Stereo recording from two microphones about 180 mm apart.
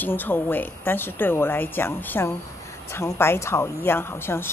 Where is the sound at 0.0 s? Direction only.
10° left (ahead or behind).